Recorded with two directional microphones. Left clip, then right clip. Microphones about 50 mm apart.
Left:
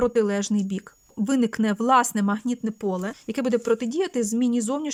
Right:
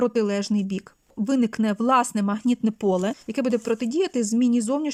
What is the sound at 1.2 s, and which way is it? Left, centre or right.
Speech, centre.